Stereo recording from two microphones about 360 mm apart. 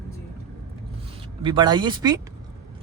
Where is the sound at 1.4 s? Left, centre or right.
Centre.